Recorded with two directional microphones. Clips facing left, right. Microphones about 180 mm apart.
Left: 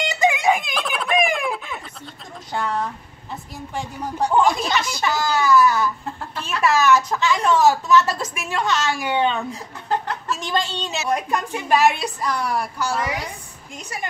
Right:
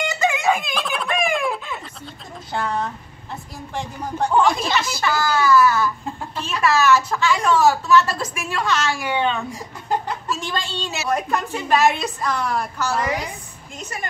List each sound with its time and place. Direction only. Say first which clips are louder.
0.1 s a sound: left 3 dB; 15° left (ahead or behind)
2.5 s speech: even; centre (ahead or behind)
5.0 s a woman's voice: right 1 dB; 15° left (ahead or behind)
6.0 s speech: right 1 dB; 15° right (ahead or behind)
6.7 s a woman's voice: even; 15° left (ahead or behind)
9.5 s speech: even; 10° right (ahead or behind)
10.4 s a woman's voice: left 3 dB; 20° left (ahead or behind)